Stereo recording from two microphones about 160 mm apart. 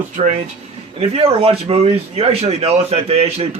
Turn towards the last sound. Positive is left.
turn(degrees=-40)  # may be behind; listen again after turning